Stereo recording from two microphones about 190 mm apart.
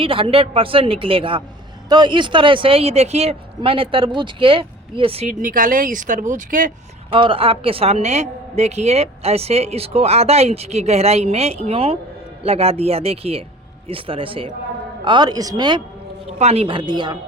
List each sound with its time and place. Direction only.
0.0 s speech: 30° right (ahead or behind)
5.4 s speech: 45° right (ahead or behind)
7.1 s a woman's voice: 30° right (ahead or behind)
16.4 s speech: 35° right (ahead or behind)